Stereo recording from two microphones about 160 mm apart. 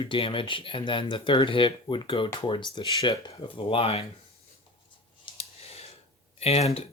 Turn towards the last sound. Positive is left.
turn(degrees=40)  # may be behind; listen again after turning